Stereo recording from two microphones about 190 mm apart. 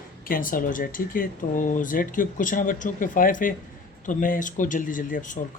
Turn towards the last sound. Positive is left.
turn(degrees=45)  # may be behind; listen again after turning